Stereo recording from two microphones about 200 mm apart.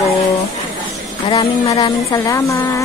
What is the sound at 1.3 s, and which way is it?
Speech, 25° left (ahead or behind).